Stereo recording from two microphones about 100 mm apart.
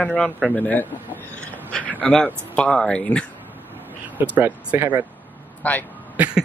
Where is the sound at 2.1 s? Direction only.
10° left (ahead or behind).